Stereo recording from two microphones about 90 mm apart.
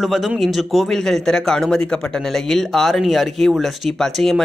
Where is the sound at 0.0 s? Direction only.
Centre (ahead or behind).